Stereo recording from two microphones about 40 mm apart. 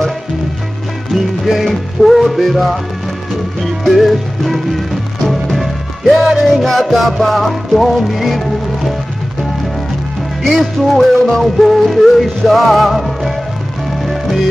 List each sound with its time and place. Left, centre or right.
1.4 s music: centre
10.4 s music: centre